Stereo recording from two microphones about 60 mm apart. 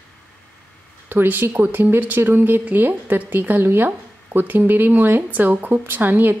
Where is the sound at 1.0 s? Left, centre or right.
Right.